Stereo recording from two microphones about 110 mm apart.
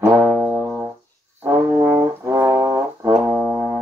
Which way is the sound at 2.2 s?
25° right (ahead or behind).